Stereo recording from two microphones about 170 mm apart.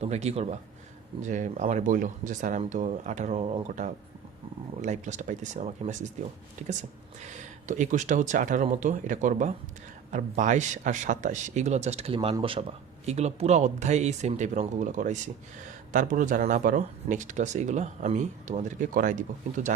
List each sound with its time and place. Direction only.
0.0 s speech: 40° right (ahead or behind)
4.8 s speech: 45° right (ahead or behind)